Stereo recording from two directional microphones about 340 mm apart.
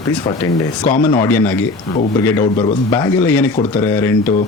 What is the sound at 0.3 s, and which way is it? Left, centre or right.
Speech, centre.